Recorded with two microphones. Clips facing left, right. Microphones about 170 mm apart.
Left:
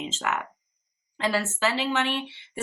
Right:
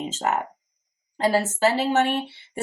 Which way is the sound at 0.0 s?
40° right (ahead or behind).